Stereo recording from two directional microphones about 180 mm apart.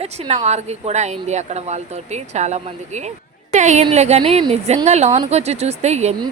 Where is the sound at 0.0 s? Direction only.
35° right (ahead or behind).